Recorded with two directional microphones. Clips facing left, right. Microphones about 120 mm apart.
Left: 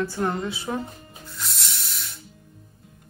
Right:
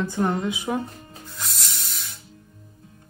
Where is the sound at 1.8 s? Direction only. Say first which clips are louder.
Even; 50° right (ahead or behind).